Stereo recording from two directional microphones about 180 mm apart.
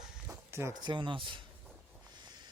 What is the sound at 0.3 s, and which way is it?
Speech, 15° right (ahead or behind).